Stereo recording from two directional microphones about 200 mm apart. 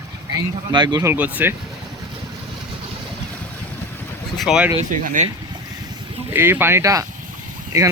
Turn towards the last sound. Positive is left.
turn(degrees=-15)  # may be behind; listen again after turning